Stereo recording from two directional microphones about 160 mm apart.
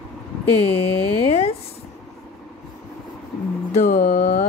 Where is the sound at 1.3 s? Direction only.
40° left (ahead or behind).